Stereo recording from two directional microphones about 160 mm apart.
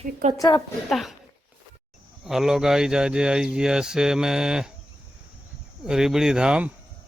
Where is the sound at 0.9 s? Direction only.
Centre (ahead or behind).